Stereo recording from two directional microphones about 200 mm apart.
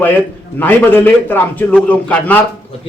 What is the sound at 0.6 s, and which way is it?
A man's voice, 10° left (ahead or behind).